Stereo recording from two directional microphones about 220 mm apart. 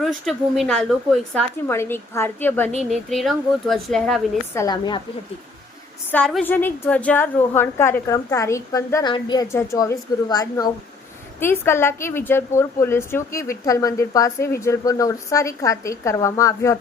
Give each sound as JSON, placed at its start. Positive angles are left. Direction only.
{"t": 0.0, "sound": "a woman's voice", "side_deg": 0}
{"t": 4.5, "sound": "a woman's voice", "side_deg": 15}
{"t": 6.1, "sound": "a woman's voice", "side_deg": 5}